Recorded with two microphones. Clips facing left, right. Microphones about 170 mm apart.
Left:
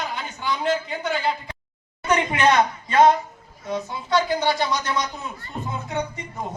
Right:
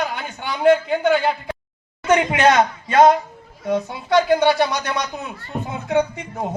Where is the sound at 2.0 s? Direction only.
80° right.